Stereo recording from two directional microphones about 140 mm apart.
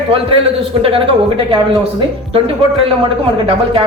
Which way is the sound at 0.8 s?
40° right (ahead or behind).